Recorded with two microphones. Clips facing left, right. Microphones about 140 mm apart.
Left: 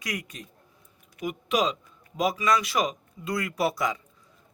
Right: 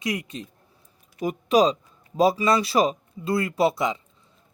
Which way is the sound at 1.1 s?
35° right (ahead or behind).